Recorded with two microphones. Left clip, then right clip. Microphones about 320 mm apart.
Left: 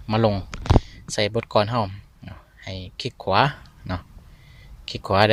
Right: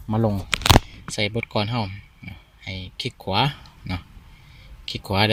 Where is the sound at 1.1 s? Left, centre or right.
Left.